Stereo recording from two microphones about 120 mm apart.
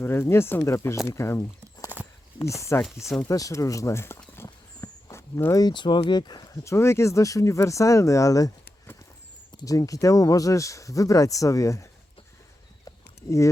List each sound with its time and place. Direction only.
0.0 s speech: 20° left (ahead or behind)
4.4 s walk: 30° left (ahead or behind)
5.4 s speech: 30° left (ahead or behind)
6.7 s speech: 20° left (ahead or behind)